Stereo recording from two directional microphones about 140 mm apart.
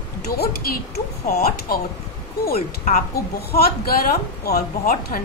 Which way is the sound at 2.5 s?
65° left (ahead or behind).